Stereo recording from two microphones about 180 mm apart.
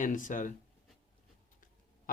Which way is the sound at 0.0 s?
45° left (ahead or behind).